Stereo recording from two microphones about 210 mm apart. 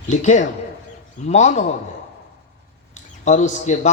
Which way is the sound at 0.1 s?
35° left (ahead or behind).